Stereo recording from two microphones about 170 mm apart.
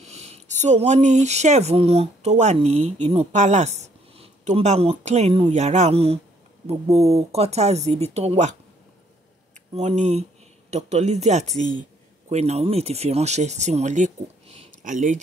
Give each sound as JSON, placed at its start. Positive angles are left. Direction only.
{"t": 0.0, "sound": "speech", "side_deg": -40}
{"t": 9.8, "sound": "speech", "side_deg": -40}